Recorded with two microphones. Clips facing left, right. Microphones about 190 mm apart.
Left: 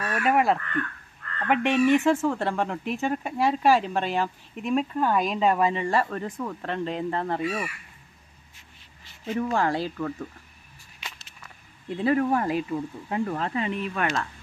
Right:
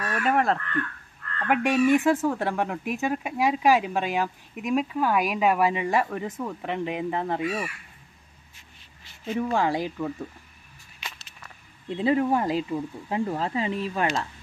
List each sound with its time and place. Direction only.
0.1 s speech: 5° left (ahead or behind); by 7.7 s 15° right (ahead or behind)
9.2 s speech: 10° right (ahead or behind)
11.9 s speech: 25° right (ahead or behind)